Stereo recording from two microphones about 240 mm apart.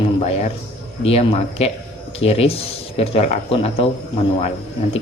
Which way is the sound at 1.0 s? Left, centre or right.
Left.